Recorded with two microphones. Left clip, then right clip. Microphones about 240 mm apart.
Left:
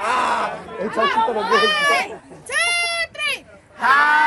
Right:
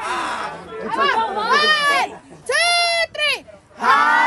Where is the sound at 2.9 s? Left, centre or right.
Right.